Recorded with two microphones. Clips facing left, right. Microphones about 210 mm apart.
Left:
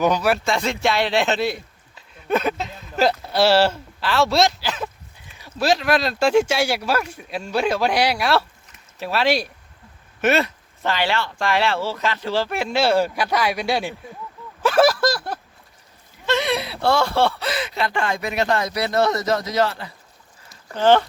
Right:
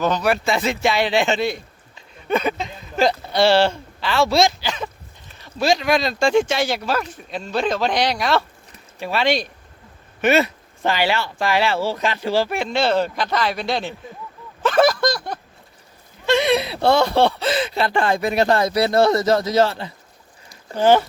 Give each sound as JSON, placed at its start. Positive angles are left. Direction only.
{"t": 0.0, "sound": "speech", "side_deg": 10}
{"t": 11.9, "sound": "speech", "side_deg": -15}
{"t": 12.5, "sound": "speech", "side_deg": 5}
{"t": 16.2, "sound": "speech", "side_deg": -15}
{"t": 20.7, "sound": "speech", "side_deg": -10}